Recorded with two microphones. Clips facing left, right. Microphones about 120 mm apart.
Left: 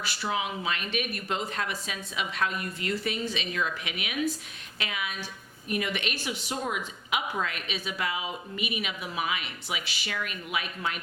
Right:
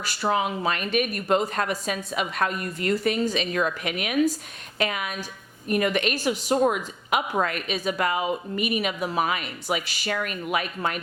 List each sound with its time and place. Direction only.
0.0 s a woman's voice: 45° right (ahead or behind)